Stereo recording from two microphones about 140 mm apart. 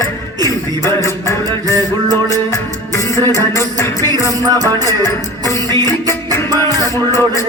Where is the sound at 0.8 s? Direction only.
20° left (ahead or behind).